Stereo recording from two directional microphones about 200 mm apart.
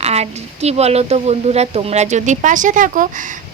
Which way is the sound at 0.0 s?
30° right (ahead or behind).